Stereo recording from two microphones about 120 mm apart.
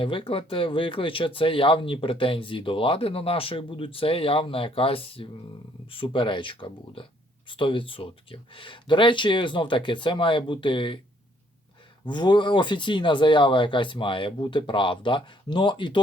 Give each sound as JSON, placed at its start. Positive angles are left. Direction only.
{"t": 0.0, "sound": "speech", "side_deg": 45}
{"t": 12.0, "sound": "speech", "side_deg": 40}